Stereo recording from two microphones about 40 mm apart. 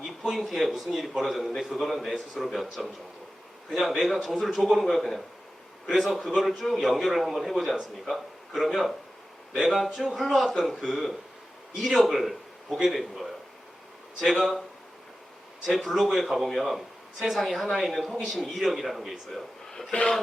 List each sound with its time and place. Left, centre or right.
0.0 s a man's voice: centre
15.6 s a man's voice: centre
19.9 s speech: left